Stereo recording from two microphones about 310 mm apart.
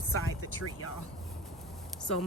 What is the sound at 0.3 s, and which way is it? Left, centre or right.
Vehicle, left.